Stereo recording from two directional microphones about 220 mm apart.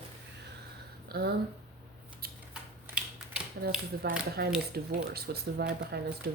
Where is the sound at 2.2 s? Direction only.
45° right (ahead or behind).